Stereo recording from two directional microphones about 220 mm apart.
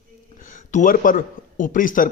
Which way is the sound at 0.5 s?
35° left (ahead or behind).